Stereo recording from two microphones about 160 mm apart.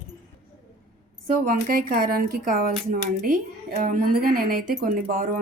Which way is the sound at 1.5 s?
65° right (ahead or behind).